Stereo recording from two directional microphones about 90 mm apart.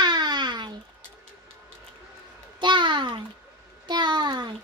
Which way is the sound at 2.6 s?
60° right (ahead or behind).